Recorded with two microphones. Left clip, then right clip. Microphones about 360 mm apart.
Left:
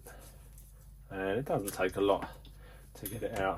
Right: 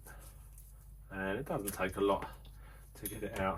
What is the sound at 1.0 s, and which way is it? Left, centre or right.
Speech, left.